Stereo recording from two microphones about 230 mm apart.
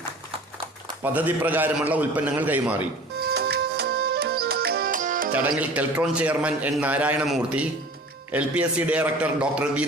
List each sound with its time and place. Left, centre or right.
1.0 s a man's voice: centre
3.2 s music: right
5.3 s a man's voice: centre